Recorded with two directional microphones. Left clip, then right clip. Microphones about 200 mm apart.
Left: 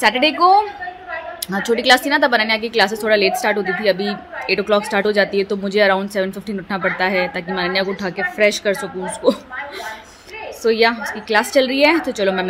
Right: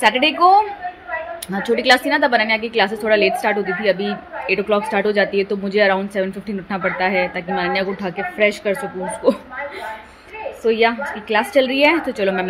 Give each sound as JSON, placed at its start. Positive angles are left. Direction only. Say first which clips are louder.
{"t": 0.0, "sound": "a woman's voice", "louder": "even", "side_deg": 15}
{"t": 10.6, "sound": "a woman's voice", "louder": "left 1 dB", "side_deg": 20}